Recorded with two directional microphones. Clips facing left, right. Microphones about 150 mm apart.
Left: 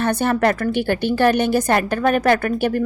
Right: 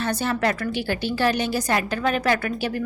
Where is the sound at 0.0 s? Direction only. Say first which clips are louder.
Left 6 dB; 55° left (ahead or behind).